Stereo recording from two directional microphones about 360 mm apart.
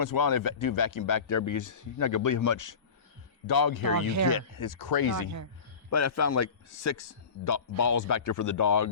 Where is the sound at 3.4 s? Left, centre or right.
Left.